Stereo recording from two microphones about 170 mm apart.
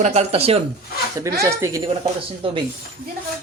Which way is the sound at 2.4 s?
30° right (ahead or behind).